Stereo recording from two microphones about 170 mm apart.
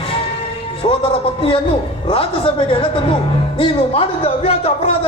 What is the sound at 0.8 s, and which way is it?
Speech, 35° left (ahead or behind).